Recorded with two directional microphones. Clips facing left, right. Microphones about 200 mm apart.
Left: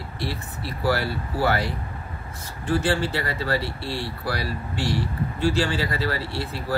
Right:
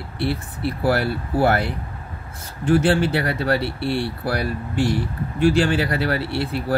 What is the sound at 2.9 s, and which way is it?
Speech, 65° right (ahead or behind).